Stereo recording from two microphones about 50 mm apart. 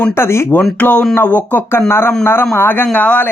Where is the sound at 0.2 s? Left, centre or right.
Left.